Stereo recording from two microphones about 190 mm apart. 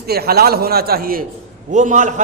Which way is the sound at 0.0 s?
55° right (ahead or behind).